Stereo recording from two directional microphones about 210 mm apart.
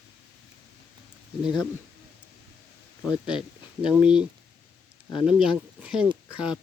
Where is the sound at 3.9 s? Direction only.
5° right (ahead or behind).